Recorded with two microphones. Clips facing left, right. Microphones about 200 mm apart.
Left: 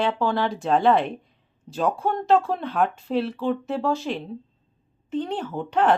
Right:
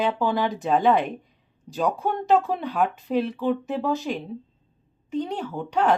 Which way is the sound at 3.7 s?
Centre (ahead or behind).